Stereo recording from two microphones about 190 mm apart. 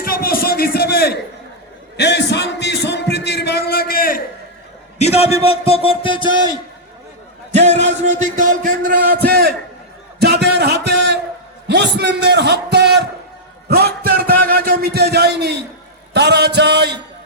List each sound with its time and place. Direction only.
0.0 s a sound: 50° left (ahead or behind)
2.0 s music: 65° left (ahead or behind)
4.9 s a man's voice: 35° left (ahead or behind)
7.5 s a man's voice: 35° right (ahead or behind); by 16.9 s 60° right (ahead or behind)